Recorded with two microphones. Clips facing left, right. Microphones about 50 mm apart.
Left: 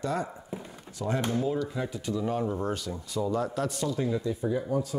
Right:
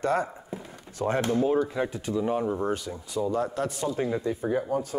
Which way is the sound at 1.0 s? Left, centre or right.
Right.